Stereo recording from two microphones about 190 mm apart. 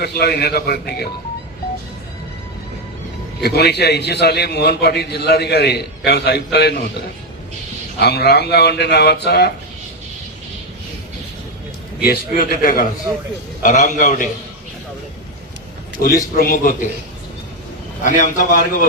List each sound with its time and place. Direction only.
0.0 s a man's voice: 55° left (ahead or behind)
3.4 s a man's voice: 60° left (ahead or behind)
7.9 s a man's voice: 60° left (ahead or behind)
12.0 s a man's voice: 55° left (ahead or behind)
16.0 s a man's voice: 50° left (ahead or behind)
18.0 s a man's voice: 45° left (ahead or behind)